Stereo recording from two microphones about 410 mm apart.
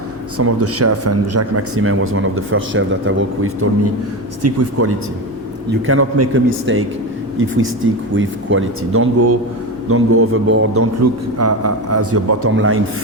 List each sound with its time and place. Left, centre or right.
0.3 s speech: right